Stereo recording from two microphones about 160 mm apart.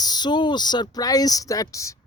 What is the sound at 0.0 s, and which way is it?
Speech, 25° left (ahead or behind).